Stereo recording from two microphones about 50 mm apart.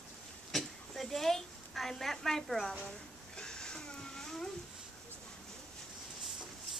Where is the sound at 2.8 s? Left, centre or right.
Centre.